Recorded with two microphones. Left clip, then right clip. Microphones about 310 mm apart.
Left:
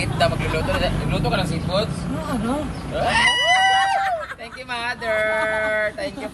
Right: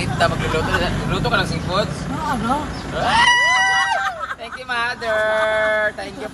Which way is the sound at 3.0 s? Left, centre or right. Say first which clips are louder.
Right 4 dB; centre.